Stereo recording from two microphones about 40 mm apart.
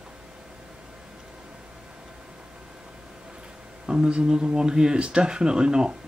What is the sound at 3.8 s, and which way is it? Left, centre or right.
Speech, right.